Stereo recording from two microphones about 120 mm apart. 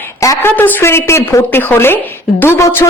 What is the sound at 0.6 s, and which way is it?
Speech, 15° left (ahead or behind).